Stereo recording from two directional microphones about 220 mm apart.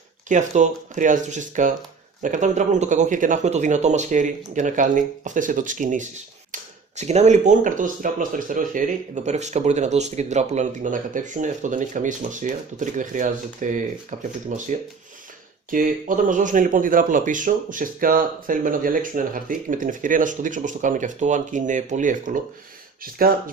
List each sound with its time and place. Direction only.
0.3 s speech: 35° right (ahead or behind)